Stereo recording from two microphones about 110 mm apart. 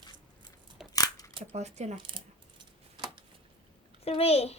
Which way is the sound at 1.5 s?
90° right.